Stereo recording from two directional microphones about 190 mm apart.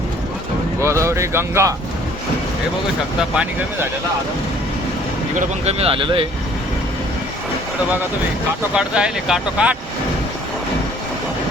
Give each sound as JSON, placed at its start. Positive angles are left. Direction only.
{"t": 0.8, "sound": "speech", "side_deg": -15}
{"t": 3.2, "sound": "speech", "side_deg": -5}
{"t": 5.4, "sound": "speech", "side_deg": -30}
{"t": 8.7, "sound": "speech", "side_deg": -5}